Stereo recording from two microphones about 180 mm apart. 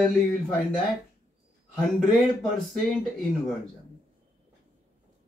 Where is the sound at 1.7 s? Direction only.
Centre (ahead or behind).